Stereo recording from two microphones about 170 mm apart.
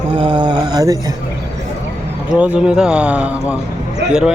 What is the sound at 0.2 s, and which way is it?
Mantra, 25° right (ahead or behind).